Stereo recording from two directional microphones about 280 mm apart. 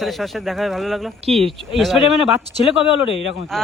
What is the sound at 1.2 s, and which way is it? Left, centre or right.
Speech, right.